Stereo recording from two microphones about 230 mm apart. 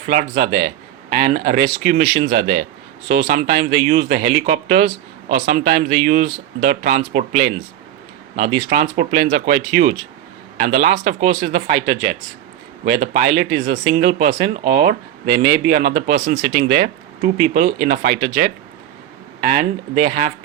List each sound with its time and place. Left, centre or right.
0.0 s a man's voice: right